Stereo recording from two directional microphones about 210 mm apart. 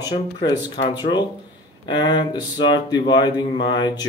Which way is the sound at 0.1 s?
25° left (ahead or behind).